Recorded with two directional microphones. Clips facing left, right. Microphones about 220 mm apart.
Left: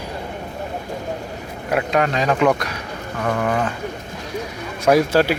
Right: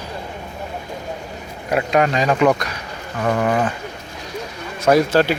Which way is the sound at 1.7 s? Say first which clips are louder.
Right 2 dB; 5° right (ahead or behind).